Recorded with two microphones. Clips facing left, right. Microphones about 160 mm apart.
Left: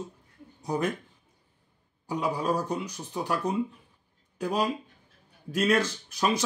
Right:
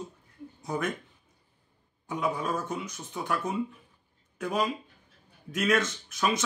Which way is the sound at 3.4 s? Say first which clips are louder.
Left 3 dB; 70° left (ahead or behind).